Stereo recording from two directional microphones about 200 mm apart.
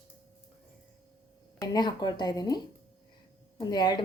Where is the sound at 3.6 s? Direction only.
20° left (ahead or behind).